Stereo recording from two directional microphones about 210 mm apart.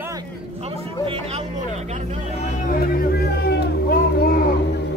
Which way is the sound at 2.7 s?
45° left (ahead or behind).